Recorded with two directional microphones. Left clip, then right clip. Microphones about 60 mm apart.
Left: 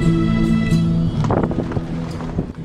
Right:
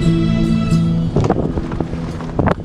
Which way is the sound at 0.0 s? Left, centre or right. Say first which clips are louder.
Right 1 dB; right.